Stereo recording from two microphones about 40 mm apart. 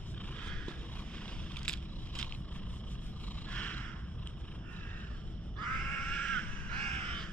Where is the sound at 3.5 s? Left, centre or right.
Left.